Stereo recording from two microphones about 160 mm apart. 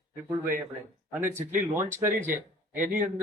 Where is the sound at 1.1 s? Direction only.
10° right (ahead or behind).